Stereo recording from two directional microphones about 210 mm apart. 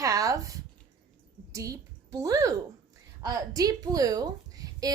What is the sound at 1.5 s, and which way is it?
A woman's voice, 15° right (ahead or behind).